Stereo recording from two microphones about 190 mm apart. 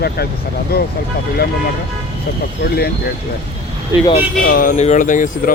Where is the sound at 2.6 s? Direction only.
55° left (ahead or behind).